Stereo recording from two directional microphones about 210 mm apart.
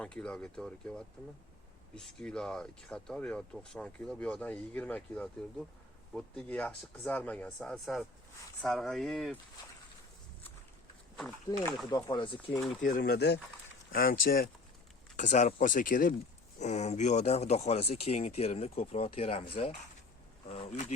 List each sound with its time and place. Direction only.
0.0 s speech: 5° left (ahead or behind)
11.9 s speech: 20° left (ahead or behind)
12.8 s speech: 45° left (ahead or behind)